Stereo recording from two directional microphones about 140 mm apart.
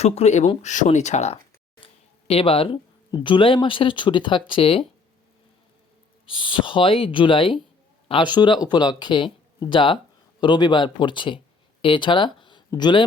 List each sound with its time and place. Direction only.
0.0 s speech: 50° left (ahead or behind)
1.8 s a sound: 45° left (ahead or behind)
3.1 s speech: 35° left (ahead or behind)
6.2 s speech: 35° left (ahead or behind)